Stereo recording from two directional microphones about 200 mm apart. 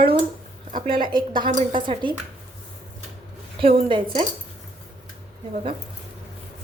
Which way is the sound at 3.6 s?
25° right (ahead or behind).